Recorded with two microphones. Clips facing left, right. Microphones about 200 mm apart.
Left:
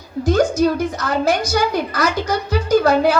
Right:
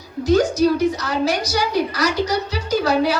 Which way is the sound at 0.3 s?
50° left (ahead or behind).